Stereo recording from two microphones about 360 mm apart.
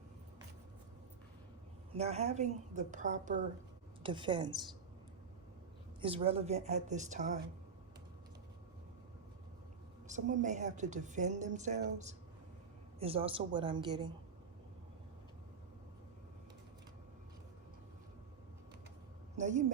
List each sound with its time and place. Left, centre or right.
2.0 s a woman's voice: centre
6.0 s a woman's voice: centre
10.1 s a woman's voice: centre
19.4 s a woman's voice: centre